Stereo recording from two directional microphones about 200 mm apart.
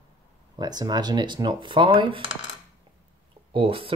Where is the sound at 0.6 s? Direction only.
20° right (ahead or behind).